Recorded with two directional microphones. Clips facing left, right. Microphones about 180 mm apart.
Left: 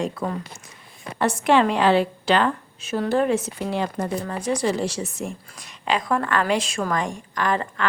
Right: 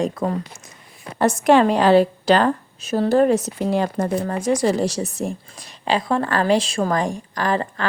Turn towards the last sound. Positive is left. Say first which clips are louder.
# right 2 dB
turn(degrees=-35)  # may be behind; listen again after turning